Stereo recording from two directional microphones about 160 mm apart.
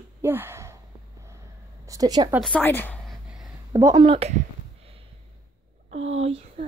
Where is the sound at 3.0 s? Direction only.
Centre (ahead or behind).